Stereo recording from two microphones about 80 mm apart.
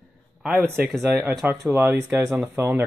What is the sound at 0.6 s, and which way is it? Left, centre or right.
Speech, right.